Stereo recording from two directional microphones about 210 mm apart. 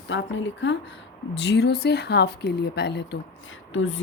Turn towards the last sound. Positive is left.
turn(degrees=65)  # may be behind; listen again after turning